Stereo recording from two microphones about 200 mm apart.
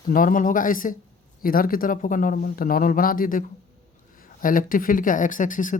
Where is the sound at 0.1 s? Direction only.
45° left (ahead or behind).